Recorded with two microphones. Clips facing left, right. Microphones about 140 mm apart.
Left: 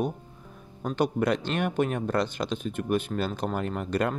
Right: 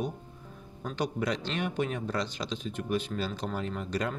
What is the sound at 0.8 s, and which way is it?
Speech, 50° left (ahead or behind).